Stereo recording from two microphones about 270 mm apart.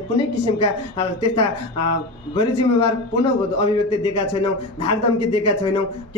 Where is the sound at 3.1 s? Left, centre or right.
Left.